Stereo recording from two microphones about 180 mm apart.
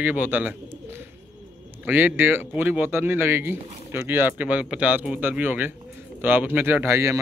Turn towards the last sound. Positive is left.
turn(degrees=-15)  # may be behind; listen again after turning